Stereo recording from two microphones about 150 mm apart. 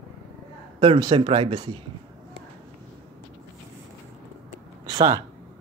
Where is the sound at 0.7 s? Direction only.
30° right (ahead or behind).